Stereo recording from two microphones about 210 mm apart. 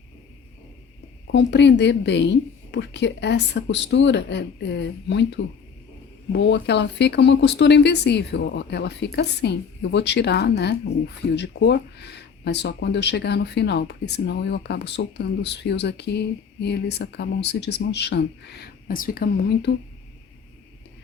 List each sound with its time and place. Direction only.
1.3 s a woman's voice: 55° left (ahead or behind)
6.3 s speech: 55° left (ahead or behind)